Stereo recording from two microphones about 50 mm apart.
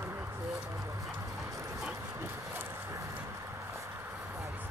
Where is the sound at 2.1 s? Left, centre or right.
Right.